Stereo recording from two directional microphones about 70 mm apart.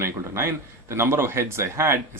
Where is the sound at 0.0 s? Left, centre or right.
Right.